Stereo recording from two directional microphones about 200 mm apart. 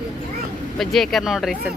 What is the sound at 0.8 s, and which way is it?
Speech, centre (ahead or behind).